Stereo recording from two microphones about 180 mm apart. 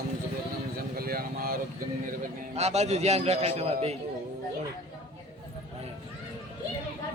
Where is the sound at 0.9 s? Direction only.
55° right (ahead or behind).